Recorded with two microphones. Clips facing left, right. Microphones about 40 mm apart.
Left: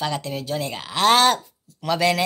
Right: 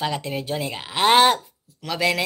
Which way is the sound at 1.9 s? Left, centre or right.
Centre.